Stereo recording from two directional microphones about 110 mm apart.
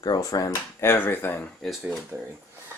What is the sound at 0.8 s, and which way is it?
Speech, 20° left (ahead or behind).